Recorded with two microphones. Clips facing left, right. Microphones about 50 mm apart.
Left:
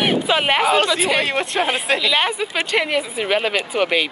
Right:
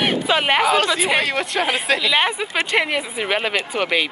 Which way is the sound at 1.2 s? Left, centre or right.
Left.